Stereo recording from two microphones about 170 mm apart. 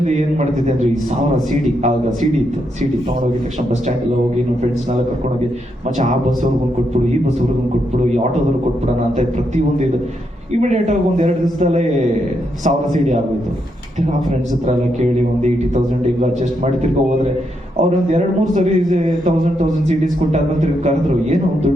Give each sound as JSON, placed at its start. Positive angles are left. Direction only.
{"t": 0.0, "sound": "speech", "side_deg": -50}
{"t": 0.8, "sound": "a man's voice", "side_deg": 0}
{"t": 10.6, "sound": "a man's voice", "side_deg": -45}
{"t": 15.4, "sound": "speech", "side_deg": -45}
{"t": 18.1, "sound": "speech", "side_deg": -50}